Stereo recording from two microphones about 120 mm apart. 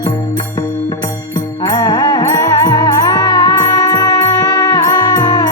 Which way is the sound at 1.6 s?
35° left (ahead or behind).